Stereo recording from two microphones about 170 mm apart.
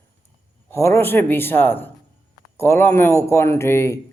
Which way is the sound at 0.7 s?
15° left (ahead or behind).